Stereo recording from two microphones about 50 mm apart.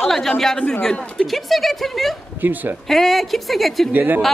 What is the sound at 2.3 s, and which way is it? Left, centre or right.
Speech, right.